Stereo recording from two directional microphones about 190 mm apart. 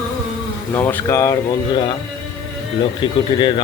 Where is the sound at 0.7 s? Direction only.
10° left (ahead or behind).